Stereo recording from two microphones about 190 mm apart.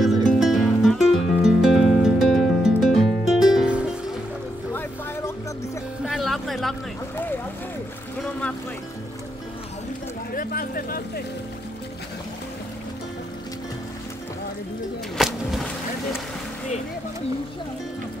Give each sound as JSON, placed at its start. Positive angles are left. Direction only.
{"t": 0.3, "sound": "music", "side_deg": 0}
{"t": 6.0, "sound": "music", "side_deg": 0}
{"t": 8.2, "sound": "boat", "side_deg": 5}
{"t": 10.3, "sound": "vehicle", "side_deg": 50}
{"t": 15.1, "sound": "a sound", "side_deg": 0}